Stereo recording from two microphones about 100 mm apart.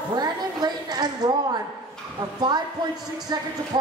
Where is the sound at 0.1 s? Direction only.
40° right (ahead or behind).